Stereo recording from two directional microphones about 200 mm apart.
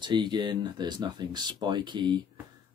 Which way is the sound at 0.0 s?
25° right (ahead or behind).